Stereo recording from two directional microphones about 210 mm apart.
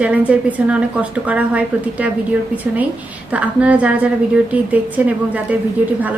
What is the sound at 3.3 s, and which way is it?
A woman's voice, 5° right (ahead or behind).